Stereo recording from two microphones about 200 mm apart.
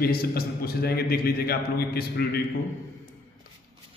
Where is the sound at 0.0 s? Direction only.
50° left (ahead or behind).